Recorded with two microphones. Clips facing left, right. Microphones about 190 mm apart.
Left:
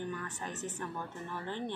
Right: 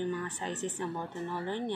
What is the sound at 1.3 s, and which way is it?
Speech, 15° right (ahead or behind).